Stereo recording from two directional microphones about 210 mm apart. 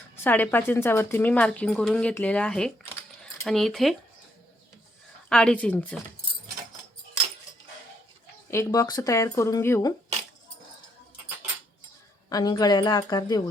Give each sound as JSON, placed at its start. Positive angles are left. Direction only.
{"t": 0.2, "sound": "a woman's voice", "side_deg": 10}
{"t": 5.3, "sound": "a woman's voice", "side_deg": 5}
{"t": 8.4, "sound": "speech", "side_deg": 15}
{"t": 12.3, "sound": "speech", "side_deg": 20}